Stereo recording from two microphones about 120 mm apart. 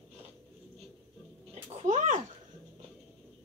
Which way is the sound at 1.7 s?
70° right (ahead or behind).